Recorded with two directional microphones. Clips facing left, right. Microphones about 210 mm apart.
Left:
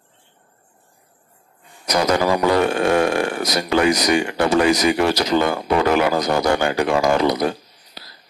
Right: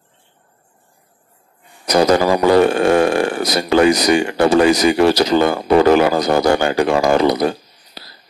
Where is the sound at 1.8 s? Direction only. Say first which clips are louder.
Right 5 dB; 30° right (ahead or behind).